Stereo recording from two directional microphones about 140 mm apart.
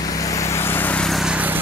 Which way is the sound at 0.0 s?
25° left (ahead or behind).